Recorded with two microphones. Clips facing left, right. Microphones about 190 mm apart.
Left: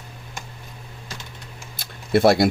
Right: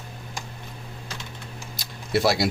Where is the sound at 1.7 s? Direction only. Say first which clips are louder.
Left 5 dB; 55° left (ahead or behind).